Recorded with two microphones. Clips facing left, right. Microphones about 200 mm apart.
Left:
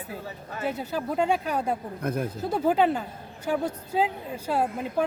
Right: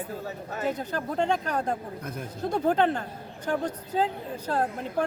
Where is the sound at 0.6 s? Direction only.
10° left (ahead or behind).